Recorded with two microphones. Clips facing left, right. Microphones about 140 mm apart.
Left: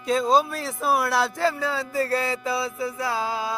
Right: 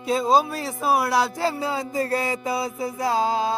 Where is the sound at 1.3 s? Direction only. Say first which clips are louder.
Even; 15° right (ahead or behind).